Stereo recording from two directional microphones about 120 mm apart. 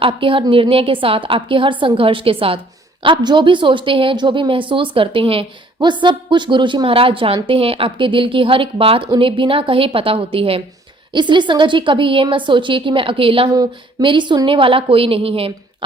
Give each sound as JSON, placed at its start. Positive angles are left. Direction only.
{"t": 0.0, "sound": "a woman's voice", "side_deg": -45}
{"t": 13.5, "sound": "a woman's voice", "side_deg": -40}